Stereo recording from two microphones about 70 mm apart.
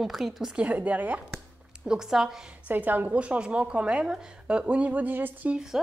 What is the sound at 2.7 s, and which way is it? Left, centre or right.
A woman's voice, right.